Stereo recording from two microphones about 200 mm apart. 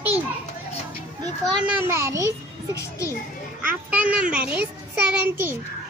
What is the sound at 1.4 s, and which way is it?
Speech, 5° right (ahead or behind).